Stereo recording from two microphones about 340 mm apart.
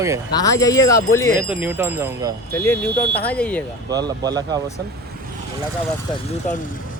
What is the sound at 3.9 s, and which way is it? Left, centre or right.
Speech, centre.